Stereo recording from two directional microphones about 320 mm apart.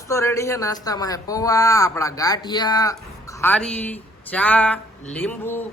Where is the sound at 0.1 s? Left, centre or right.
Centre.